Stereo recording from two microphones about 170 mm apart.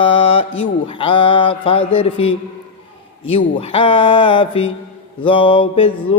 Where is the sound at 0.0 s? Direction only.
30° left (ahead or behind).